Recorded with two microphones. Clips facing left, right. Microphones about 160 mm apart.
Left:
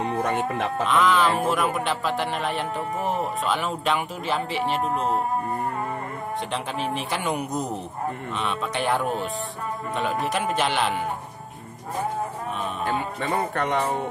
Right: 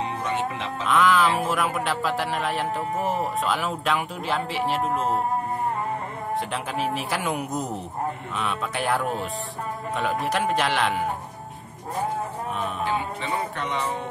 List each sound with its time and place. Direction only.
0.0 s speech: 50° left (ahead or behind)
0.8 s speech: centre (ahead or behind)
6.5 s speech: 5° right (ahead or behind)
12.8 s music: 50° left (ahead or behind)